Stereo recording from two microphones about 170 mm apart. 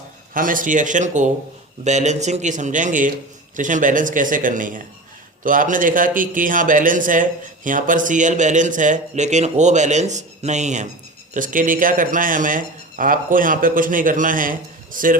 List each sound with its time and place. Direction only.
0.3 s a man's voice: 55° right (ahead or behind)